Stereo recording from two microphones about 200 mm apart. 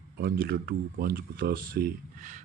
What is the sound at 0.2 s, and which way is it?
Speech, 50° right (ahead or behind).